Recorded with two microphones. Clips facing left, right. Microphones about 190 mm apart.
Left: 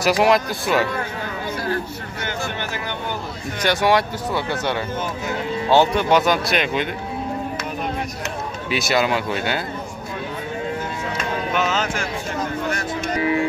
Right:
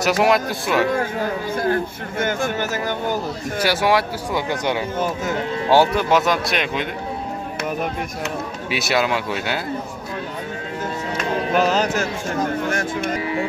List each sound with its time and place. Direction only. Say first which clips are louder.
0.0 s speech: even; centre (ahead or behind)
1.6 s a man's voice: right 5 dB; 50° right (ahead or behind)
3.6 s speech: left 1 dB; 5° right (ahead or behind)
4.3 s speech: right 2 dB; 15° right (ahead or behind)
8.6 s speech: left 1 dB; centre (ahead or behind)
11.5 s music: right 5 dB; 35° right (ahead or behind)
12.6 s music: right 2 dB; 50° right (ahead or behind)